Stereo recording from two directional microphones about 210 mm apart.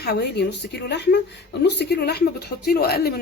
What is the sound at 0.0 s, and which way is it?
Speech, 50° left (ahead or behind).